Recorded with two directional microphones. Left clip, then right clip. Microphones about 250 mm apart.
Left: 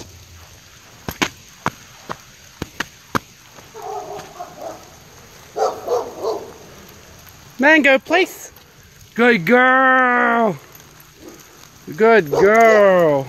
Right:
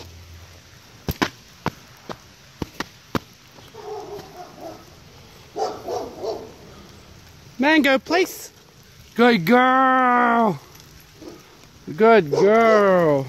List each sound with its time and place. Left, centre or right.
1.0 s a sound: centre
5.6 s bow-wow: centre
7.8 s speech: centre
9.1 s a sound: centre
12.0 s speech: centre
12.6 s speech: centre